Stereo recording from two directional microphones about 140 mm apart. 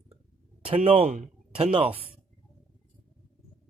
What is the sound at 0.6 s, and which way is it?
A man's voice, 40° right (ahead or behind).